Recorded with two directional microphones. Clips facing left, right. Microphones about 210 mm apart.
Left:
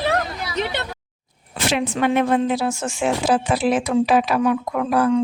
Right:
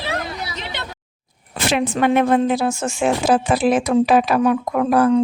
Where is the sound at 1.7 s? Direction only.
50° right (ahead or behind).